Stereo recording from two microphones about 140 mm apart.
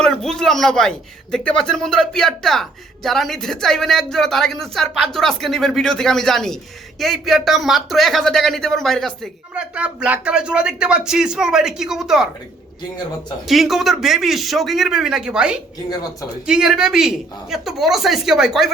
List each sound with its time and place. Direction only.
0.0 s speech: 5° left (ahead or behind)
9.7 s speech: 10° right (ahead or behind)
13.5 s speech: centre (ahead or behind)